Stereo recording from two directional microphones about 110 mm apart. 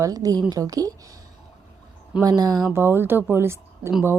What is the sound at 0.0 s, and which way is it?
Speech, 35° right (ahead or behind).